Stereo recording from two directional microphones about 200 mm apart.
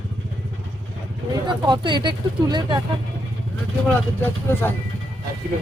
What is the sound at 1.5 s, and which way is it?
Speech, 20° right (ahead or behind).